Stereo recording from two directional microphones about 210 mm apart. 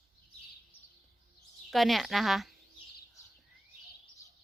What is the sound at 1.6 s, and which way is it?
Speech, centre (ahead or behind).